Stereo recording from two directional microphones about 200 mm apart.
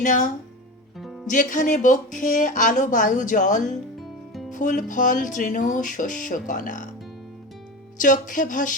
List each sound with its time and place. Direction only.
0.0 s speech: 40° left (ahead or behind)
0.9 s music: centre (ahead or behind)
1.3 s speech: 40° left (ahead or behind)
7.9 s speech: 40° left (ahead or behind)